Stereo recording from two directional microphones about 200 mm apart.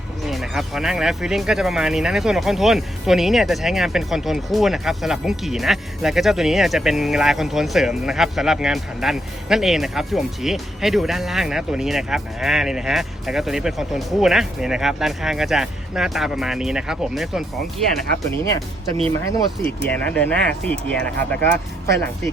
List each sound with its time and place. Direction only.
0.3 s speech: centre (ahead or behind)
18.4 s speech: 20° left (ahead or behind)
19.5 s speech: 5° left (ahead or behind)